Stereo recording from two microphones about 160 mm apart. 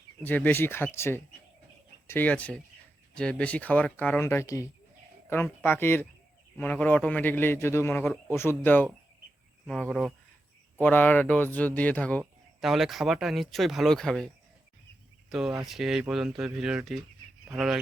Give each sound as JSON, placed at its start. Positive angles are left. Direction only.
{"t": 0.2, "sound": "speech", "side_deg": 10}
{"t": 12.5, "sound": "speech", "side_deg": 0}
{"t": 15.3, "sound": "speech", "side_deg": 0}